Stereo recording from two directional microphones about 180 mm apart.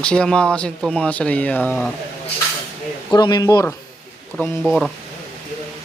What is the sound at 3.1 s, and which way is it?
Speech, 25° left (ahead or behind).